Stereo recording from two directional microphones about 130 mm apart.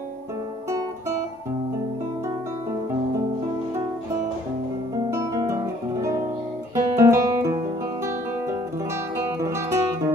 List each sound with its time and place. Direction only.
4.9 s guitar: 25° right (ahead or behind)
9.1 s music: 20° right (ahead or behind)